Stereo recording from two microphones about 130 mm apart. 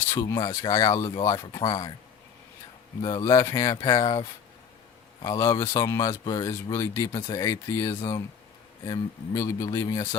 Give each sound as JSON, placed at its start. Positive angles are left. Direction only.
{"t": 0.1, "sound": "speech", "side_deg": 25}
{"t": 3.0, "sound": "speech", "side_deg": 30}